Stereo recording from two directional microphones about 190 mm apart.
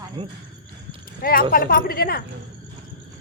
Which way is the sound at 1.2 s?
50° left (ahead or behind).